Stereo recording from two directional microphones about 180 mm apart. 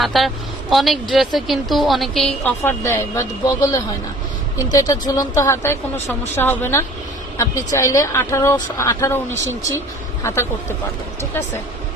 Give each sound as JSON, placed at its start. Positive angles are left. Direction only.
{"t": 0.0, "sound": "a woman's voice", "side_deg": 0}
{"t": 2.6, "sound": "a woman's voice", "side_deg": 15}